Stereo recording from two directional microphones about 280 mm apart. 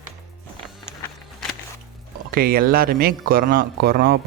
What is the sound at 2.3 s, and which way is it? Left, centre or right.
Speech, right.